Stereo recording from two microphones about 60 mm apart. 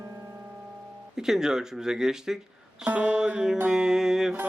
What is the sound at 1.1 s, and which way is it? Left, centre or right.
Speech, centre.